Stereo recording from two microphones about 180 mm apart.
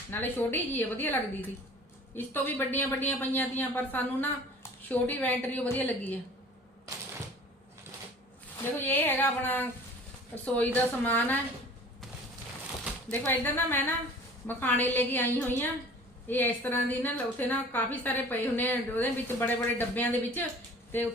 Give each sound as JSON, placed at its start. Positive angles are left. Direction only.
{"t": 0.1, "sound": "a woman's voice", "side_deg": 10}
{"t": 8.8, "sound": "a woman's voice", "side_deg": 10}
{"t": 12.8, "sound": "a woman's voice", "side_deg": 5}